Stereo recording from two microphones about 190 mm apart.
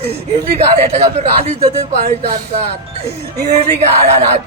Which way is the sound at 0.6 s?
30° right (ahead or behind).